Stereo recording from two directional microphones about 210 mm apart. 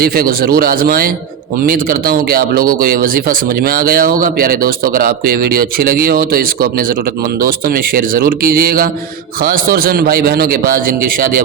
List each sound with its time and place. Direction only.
0.0 s speech: 45° right (ahead or behind)